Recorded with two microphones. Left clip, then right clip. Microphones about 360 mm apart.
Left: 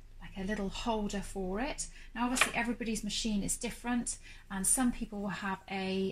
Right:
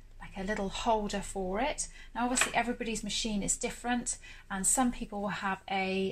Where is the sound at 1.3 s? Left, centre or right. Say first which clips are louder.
Right 3 dB; right.